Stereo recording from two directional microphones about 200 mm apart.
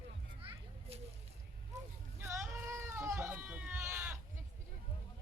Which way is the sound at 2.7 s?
10° right (ahead or behind).